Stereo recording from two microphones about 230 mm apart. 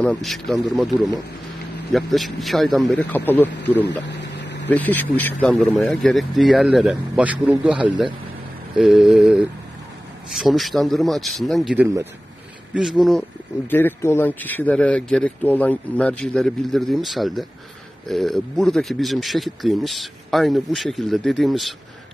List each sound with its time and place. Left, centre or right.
0.0 s speech: centre
4.1 s a sound: left
4.6 s speech: centre
13.7 s speech: centre